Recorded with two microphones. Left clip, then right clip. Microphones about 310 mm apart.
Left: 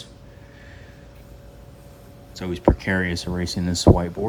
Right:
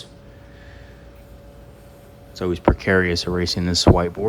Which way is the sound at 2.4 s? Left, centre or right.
Centre.